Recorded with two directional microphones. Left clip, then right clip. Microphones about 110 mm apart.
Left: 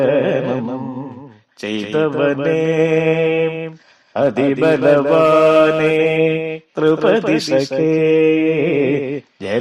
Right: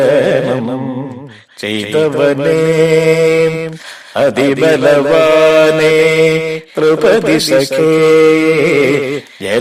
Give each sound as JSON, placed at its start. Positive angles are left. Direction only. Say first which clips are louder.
{"t": 0.0, "sound": "music", "louder": "right 5 dB", "side_deg": -40}
{"t": 1.6, "sound": "chant", "louder": "right 5 dB", "side_deg": -35}
{"t": 4.1, "sound": "chant", "louder": "right 5 dB", "side_deg": -40}